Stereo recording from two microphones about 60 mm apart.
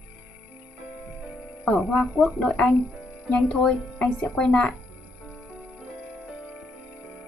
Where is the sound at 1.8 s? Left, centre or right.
Centre.